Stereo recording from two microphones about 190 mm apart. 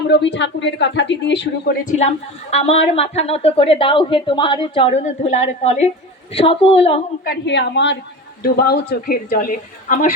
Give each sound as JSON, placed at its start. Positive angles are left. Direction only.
{"t": 0.1, "sound": "speech", "side_deg": 65}
{"t": 1.8, "sound": "a woman's voice", "side_deg": 40}
{"t": 7.3, "sound": "speech", "side_deg": 65}
{"t": 8.4, "sound": "a woman's voice", "side_deg": 55}